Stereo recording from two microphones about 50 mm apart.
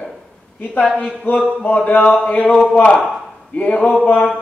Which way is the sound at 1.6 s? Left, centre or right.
Left.